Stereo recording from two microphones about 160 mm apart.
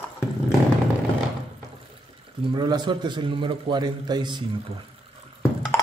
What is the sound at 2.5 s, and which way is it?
A man's voice, 25° right (ahead or behind).